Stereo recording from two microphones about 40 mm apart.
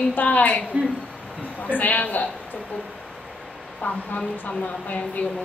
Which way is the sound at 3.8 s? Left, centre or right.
Left.